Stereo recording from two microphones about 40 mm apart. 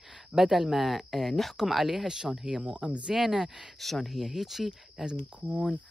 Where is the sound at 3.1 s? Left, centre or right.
Centre.